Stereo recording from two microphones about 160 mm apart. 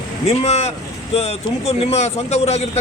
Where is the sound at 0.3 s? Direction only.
40° left (ahead or behind).